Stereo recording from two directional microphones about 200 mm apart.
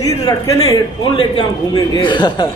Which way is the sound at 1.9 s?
25° left (ahead or behind).